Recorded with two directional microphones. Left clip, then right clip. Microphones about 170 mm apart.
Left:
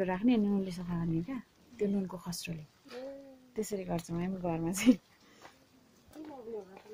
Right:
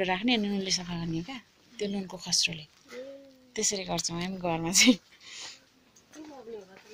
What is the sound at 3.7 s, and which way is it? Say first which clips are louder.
A woman's voice: right 5 dB; 5° left (ahead or behind).